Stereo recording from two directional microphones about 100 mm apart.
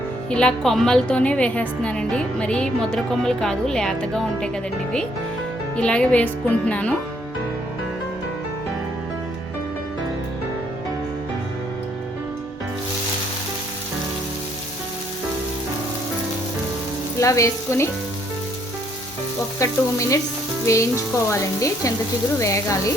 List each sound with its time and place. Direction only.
0.3 s a woman's voice: 10° left (ahead or behind)
17.2 s frying: 30° left (ahead or behind)
19.5 s frying: 30° left (ahead or behind)